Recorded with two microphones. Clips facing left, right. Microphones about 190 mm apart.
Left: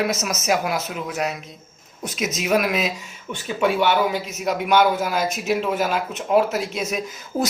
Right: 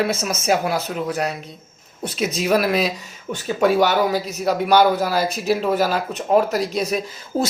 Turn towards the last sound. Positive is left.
turn(degrees=-25)  # may be behind; listen again after turning